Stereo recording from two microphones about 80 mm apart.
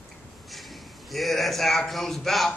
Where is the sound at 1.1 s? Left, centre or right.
Centre.